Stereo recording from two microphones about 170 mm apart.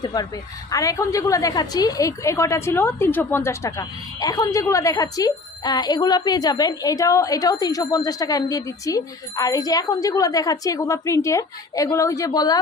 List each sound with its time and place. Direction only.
0.0 s a woman's voice: 25° left (ahead or behind)